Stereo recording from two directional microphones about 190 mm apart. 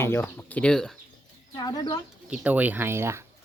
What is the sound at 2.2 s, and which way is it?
Speech, 5° right (ahead or behind).